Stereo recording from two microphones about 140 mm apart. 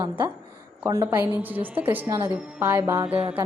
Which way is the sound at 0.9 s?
20° right (ahead or behind).